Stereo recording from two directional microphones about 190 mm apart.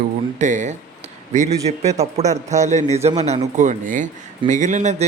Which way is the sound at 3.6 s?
40° right (ahead or behind).